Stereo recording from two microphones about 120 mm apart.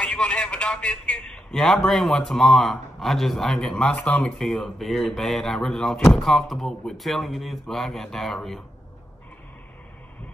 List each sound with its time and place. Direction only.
0.0 s a man's voice: 5° left (ahead or behind)